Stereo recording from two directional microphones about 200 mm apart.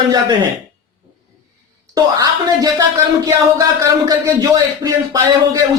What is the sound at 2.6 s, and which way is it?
Speech, 15° right (ahead or behind).